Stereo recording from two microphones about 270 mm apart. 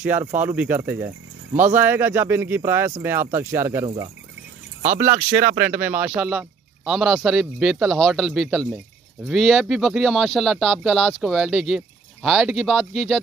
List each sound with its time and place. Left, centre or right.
0.0 s speech: centre
4.8 s speech: right
5.6 s speech: centre